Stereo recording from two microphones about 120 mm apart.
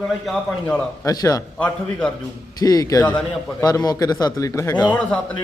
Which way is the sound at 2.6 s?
30° left (ahead or behind).